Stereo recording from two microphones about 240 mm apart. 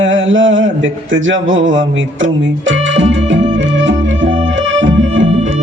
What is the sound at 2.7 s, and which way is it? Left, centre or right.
Music, right.